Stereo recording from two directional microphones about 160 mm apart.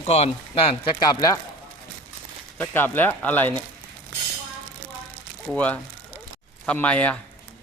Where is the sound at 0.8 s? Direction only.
25° left (ahead or behind).